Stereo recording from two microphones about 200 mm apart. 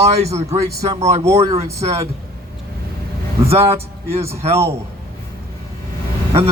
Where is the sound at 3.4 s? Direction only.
30° right (ahead or behind).